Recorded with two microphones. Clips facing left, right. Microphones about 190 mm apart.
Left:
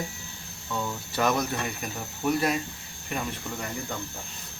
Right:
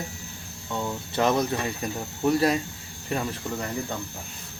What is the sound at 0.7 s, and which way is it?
Speech, 25° right (ahead or behind).